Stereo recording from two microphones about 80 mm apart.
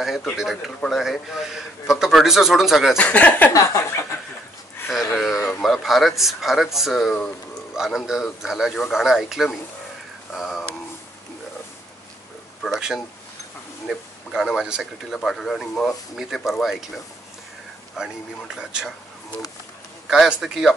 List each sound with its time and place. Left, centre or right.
0.0 s a man's voice: centre
3.0 s speech: centre
3.5 s a sound: left
4.9 s a sound: centre
5.6 s a man's voice: centre
10.3 s a sound: centre
13.8 s a man's voice: centre
17.9 s speech: centre
20.1 s a man's voice: centre